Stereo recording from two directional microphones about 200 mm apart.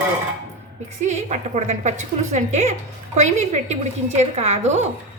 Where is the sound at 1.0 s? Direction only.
35° right (ahead or behind).